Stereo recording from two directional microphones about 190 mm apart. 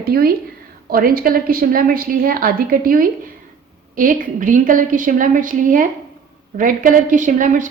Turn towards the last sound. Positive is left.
turn(degrees=-45)  # may be behind; listen again after turning